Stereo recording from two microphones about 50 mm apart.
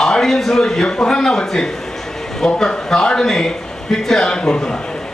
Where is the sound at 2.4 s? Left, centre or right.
Centre.